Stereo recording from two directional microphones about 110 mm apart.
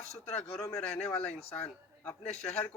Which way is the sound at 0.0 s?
80° left.